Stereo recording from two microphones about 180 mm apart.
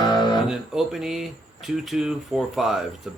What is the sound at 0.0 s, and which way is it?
Guitar, 25° left (ahead or behind).